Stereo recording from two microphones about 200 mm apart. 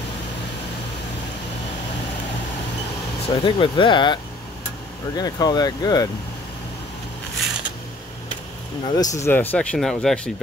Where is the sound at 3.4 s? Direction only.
25° left (ahead or behind).